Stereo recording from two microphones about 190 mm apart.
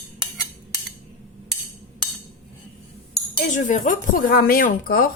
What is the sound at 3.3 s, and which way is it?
Speech, 40° left (ahead or behind).